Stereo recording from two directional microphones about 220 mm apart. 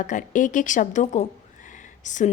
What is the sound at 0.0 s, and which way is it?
Speech, 35° left (ahead or behind).